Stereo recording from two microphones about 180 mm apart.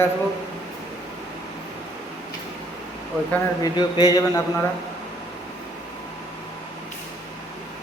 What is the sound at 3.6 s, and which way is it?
Speech, 20° left (ahead or behind).